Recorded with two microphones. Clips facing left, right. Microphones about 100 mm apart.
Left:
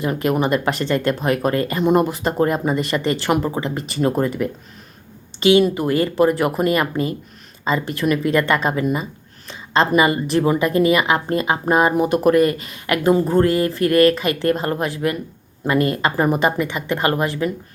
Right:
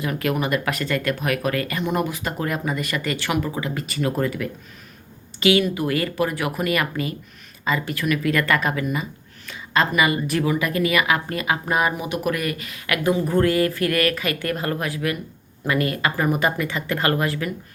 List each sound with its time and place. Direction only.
0.0 s speech: 25° left (ahead or behind)